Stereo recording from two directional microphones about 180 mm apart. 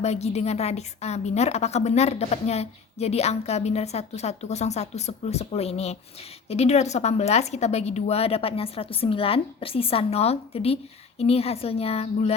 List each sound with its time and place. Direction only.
0.0 s a woman's voice: 35° left (ahead or behind)